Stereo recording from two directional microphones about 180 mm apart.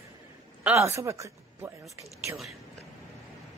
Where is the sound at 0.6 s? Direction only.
15° right (ahead or behind).